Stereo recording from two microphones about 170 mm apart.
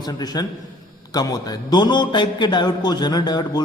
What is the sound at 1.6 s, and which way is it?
A man's voice, 25° left (ahead or behind).